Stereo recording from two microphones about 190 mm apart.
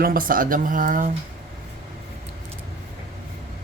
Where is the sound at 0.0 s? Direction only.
50° right (ahead or behind).